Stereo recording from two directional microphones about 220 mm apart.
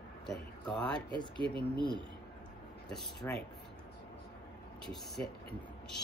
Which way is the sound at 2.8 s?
5° left (ahead or behind).